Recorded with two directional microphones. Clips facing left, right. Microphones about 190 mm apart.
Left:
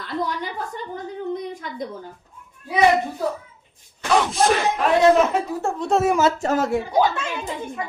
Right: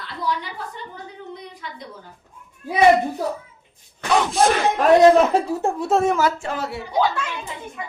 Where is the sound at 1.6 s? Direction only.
45° left (ahead or behind).